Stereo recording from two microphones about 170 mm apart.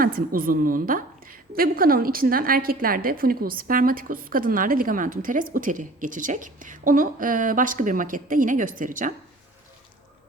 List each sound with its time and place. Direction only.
0.0 s a woman's voice: 55° right (ahead or behind)